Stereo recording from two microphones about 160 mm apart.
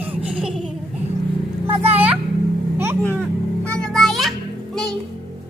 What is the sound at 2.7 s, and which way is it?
Vehicle, 15° right (ahead or behind).